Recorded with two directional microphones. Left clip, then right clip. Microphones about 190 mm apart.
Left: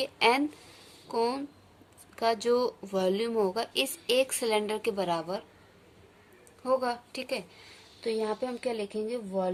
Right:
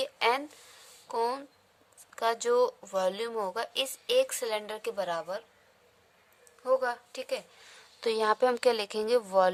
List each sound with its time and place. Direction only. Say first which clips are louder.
0.0 s speech: left 3 dB; 25° right (ahead or behind)
6.6 s speech: even; 35° right (ahead or behind)
8.0 s speech: right 5 dB; 55° right (ahead or behind)